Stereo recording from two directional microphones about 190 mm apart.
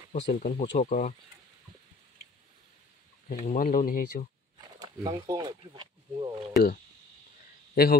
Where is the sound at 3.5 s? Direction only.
45° left (ahead or behind).